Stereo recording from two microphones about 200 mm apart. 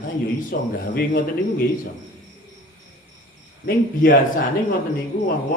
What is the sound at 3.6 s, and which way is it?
Speech, 50° left (ahead or behind).